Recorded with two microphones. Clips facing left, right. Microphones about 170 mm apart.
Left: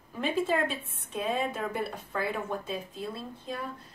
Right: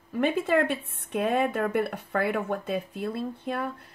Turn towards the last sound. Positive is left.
turn(degrees=-60)  # may be behind; listen again after turning